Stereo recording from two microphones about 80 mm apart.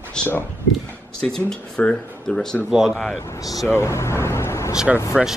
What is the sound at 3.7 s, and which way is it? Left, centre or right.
Speech, left.